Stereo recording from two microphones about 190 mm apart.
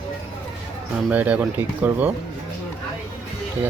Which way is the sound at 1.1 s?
10° right (ahead or behind).